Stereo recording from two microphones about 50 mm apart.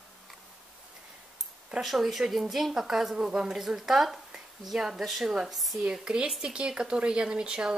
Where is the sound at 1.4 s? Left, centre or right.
Centre.